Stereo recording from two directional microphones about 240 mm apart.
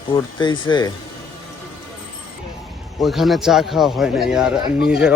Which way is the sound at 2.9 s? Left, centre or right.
Centre.